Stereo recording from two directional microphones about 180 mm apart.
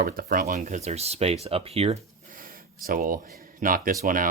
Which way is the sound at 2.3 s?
50° right (ahead or behind).